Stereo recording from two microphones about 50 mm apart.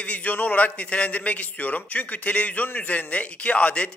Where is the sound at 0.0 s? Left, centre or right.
Left.